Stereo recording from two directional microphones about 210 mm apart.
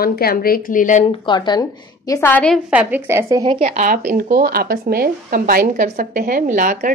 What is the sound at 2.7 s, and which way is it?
Speech, 5° right (ahead or behind).